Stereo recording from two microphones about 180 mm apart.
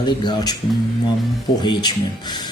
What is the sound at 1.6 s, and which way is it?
Speech, 25° left (ahead or behind).